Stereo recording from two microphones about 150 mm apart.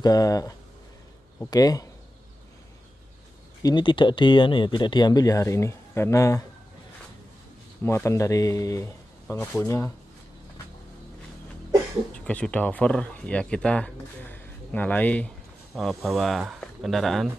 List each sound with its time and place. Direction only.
0.0 s speech: 25° left (ahead or behind)
3.6 s speech: 30° left (ahead or behind)
7.8 s speech: 15° left (ahead or behind)
12.1 s speech: 10° left (ahead or behind)